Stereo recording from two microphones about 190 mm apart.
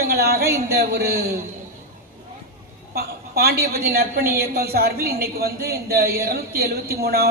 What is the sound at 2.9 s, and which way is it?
A woman's voice, 55° right (ahead or behind).